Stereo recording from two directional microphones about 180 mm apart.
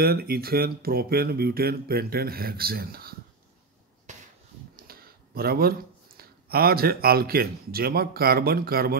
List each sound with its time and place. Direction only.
0.0 s speech: 60° right (ahead or behind)
4.1 s a sound: 40° right (ahead or behind)
4.7 s speech: 55° right (ahead or behind)